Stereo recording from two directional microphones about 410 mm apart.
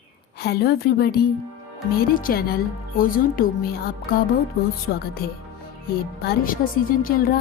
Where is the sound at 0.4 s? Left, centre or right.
Left.